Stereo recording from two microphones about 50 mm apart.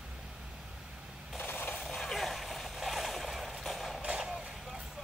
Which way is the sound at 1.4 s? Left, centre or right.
Left.